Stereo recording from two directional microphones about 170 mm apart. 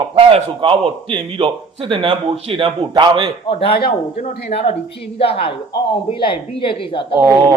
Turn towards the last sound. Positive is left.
turn(degrees=-15)  # may be behind; listen again after turning